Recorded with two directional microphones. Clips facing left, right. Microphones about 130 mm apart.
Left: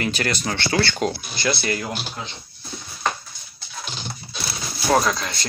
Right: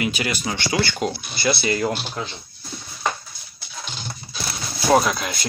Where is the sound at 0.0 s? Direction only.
10° right (ahead or behind).